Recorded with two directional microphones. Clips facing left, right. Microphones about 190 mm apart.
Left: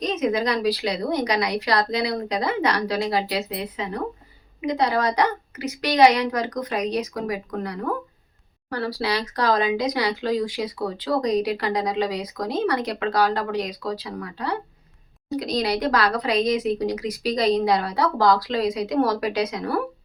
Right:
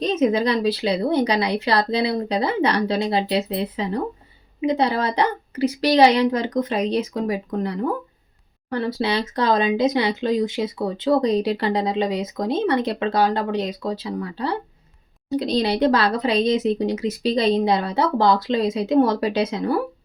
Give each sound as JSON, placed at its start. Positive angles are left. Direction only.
{"t": 0.0, "sound": "speech", "side_deg": -30}